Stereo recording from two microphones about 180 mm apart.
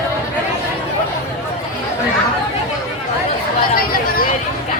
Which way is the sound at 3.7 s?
55° left (ahead or behind).